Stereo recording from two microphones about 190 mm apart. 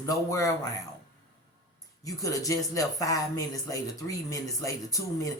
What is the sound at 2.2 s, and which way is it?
Speech, 15° left (ahead or behind).